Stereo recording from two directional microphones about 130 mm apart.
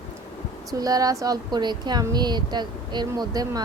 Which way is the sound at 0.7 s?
30° right (ahead or behind).